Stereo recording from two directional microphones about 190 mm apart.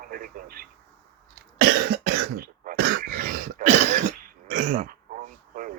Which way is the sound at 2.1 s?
50° right (ahead or behind).